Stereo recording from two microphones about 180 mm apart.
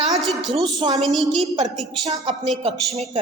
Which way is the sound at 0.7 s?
25° right (ahead or behind).